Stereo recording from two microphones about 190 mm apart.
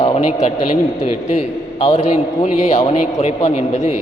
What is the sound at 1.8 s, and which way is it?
A man's voice, 35° left (ahead or behind).